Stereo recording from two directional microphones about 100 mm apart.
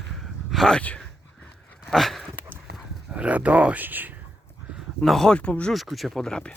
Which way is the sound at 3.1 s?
15° right (ahead or behind).